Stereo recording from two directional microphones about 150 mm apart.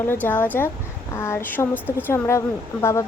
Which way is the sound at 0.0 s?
15° left (ahead or behind).